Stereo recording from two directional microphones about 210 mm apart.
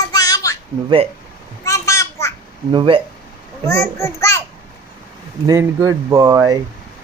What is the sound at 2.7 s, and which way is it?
Speech, 25° right (ahead or behind).